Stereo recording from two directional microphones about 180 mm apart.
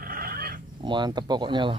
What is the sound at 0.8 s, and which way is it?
Speech, 25° right (ahead or behind).